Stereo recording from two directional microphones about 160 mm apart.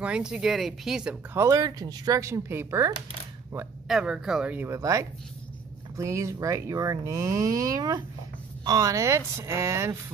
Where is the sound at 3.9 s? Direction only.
5° right (ahead or behind).